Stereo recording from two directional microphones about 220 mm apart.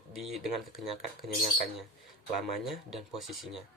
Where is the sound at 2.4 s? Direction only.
Centre (ahead or behind).